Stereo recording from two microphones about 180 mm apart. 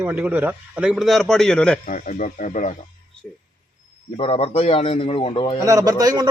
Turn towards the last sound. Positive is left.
turn(degrees=-20)  # may be behind; listen again after turning